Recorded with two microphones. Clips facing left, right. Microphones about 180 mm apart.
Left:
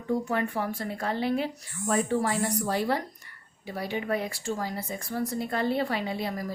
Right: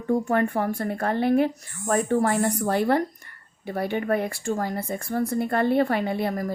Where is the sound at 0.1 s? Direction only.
50° right (ahead or behind).